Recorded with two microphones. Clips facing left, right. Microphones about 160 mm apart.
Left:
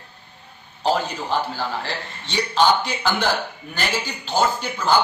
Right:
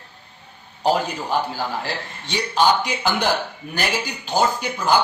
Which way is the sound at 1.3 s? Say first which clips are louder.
Right 1 dB; 10° right (ahead or behind).